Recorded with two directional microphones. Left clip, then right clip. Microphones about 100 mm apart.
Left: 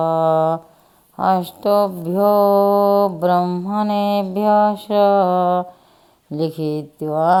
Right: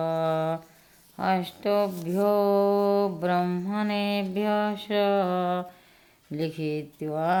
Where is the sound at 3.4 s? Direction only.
30° left (ahead or behind).